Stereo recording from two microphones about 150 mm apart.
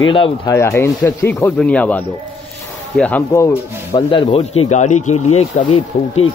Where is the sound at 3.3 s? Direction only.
20° left (ahead or behind).